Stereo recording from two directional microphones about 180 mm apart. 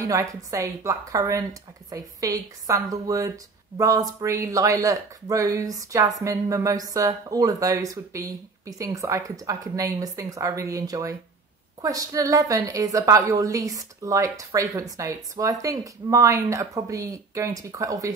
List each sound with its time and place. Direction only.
0.0 s speech: 15° right (ahead or behind)